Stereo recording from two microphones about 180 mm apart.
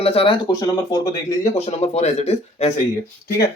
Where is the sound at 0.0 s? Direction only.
30° left (ahead or behind).